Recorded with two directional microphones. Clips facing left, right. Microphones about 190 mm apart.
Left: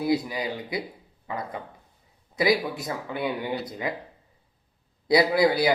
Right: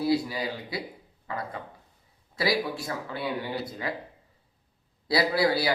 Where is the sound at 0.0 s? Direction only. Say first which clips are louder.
Left 1 dB; 20° left (ahead or behind).